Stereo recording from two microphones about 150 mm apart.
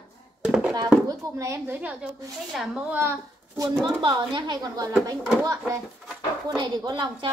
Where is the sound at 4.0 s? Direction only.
30° right (ahead or behind).